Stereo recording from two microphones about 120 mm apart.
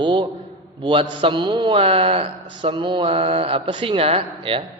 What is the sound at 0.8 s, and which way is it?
A man's voice, 45° right (ahead or behind).